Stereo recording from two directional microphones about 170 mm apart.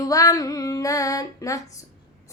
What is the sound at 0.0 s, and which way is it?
Female singing, 20° left (ahead or behind).